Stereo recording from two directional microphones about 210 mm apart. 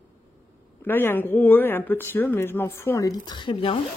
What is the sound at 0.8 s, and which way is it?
Speech, 10° left (ahead or behind).